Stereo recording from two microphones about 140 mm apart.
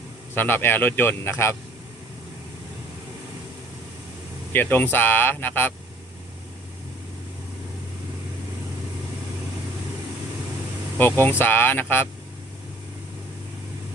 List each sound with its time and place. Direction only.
0.3 s speech: 15° left (ahead or behind)
4.5 s speech: 15° left (ahead or behind)
11.2 s speech: 15° left (ahead or behind)